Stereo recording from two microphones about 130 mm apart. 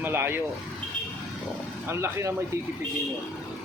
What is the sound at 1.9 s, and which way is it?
Speech, 20° right (ahead or behind).